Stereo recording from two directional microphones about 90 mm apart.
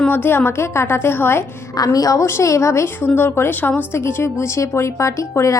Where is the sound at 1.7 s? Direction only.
45° left (ahead or behind); by 3.8 s 20° left (ahead or behind).